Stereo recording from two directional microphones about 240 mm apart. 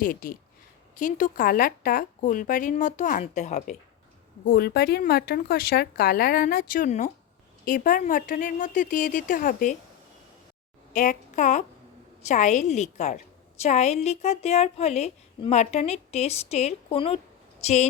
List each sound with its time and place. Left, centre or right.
0.0 s a woman's voice: left
4.4 s a woman's voice: left
10.9 s a woman's voice: left